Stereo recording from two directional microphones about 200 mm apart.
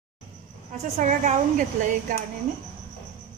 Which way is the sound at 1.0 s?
35° right (ahead or behind).